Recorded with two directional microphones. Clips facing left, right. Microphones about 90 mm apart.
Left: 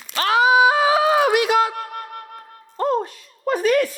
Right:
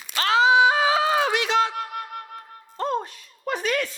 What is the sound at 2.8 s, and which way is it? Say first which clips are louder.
Music: left 5 dB; 20° left (ahead or behind).